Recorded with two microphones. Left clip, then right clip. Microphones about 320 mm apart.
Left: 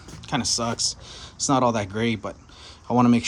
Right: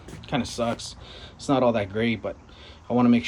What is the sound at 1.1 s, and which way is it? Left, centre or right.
Speech, centre.